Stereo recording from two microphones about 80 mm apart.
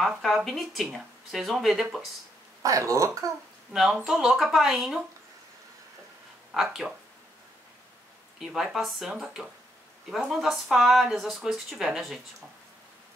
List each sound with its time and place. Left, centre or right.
0.5 s speech: centre
2.6 s speech: right
3.7 s speech: centre
6.5 s speech: centre
8.4 s speech: centre